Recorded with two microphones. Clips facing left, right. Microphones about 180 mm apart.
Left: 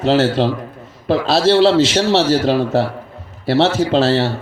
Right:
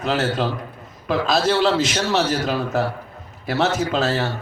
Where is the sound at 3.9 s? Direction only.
30° left (ahead or behind).